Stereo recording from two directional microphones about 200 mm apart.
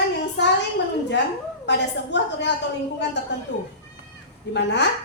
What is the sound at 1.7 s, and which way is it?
Speech, 60° left (ahead or behind).